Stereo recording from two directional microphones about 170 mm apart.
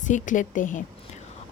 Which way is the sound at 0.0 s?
50° left (ahead or behind).